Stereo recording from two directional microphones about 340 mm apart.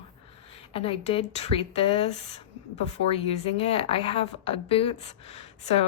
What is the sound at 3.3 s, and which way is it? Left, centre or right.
A woman's voice, centre.